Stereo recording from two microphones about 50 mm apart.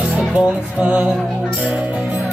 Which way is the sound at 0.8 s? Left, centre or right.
Right.